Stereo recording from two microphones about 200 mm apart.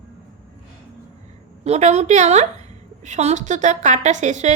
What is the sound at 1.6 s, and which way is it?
A woman's voice, 35° right (ahead or behind).